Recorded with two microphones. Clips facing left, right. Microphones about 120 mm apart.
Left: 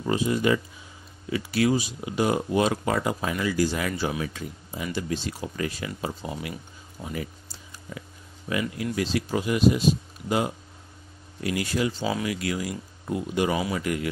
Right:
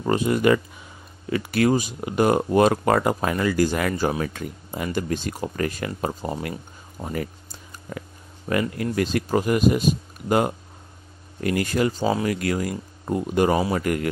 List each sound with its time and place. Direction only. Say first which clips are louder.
0.0 s speech: right 4 dB; 55° right (ahead or behind)